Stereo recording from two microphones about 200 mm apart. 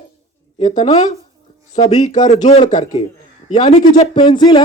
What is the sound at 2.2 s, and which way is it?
Speech, 35° left (ahead or behind).